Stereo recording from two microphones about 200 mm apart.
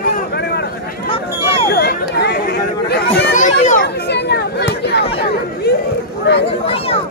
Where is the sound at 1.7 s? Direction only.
55° left (ahead or behind).